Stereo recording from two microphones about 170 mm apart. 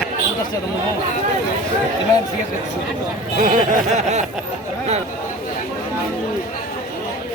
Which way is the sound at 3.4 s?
50° right (ahead or behind).